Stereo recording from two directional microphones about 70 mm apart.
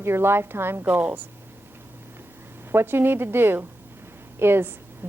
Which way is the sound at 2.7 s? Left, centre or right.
Right.